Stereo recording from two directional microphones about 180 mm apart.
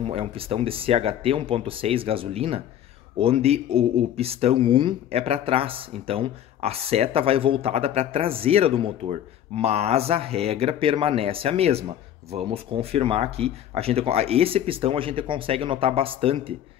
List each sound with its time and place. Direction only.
0.0 s speech: 30° right (ahead or behind)